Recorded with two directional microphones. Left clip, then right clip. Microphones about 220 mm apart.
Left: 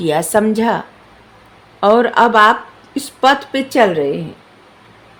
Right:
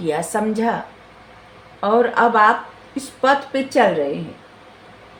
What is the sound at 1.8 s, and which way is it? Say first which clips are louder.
A woman's voice: left 5 dB; 50° left (ahead or behind).